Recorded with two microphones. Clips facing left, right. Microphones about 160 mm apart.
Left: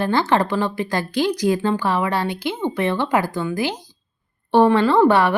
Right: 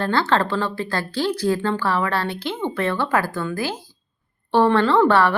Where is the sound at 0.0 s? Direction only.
15° left (ahead or behind).